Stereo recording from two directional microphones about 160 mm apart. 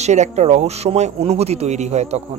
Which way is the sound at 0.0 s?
45° right (ahead or behind).